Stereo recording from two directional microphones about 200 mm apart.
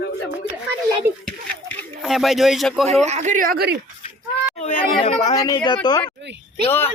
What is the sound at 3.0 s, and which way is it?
Speech, 35° right (ahead or behind).